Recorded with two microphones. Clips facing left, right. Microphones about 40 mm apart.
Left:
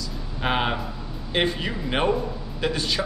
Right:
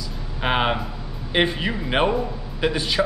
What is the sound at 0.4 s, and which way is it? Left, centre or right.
Speech, centre.